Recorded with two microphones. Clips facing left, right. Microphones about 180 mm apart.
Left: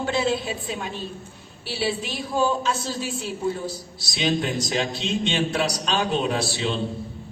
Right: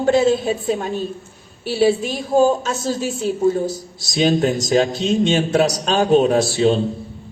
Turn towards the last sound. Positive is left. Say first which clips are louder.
# right 10 dB
turn(degrees=-45)  # may be behind; listen again after turning